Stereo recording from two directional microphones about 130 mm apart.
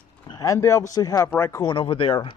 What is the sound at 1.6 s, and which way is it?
Speech, 40° left (ahead or behind).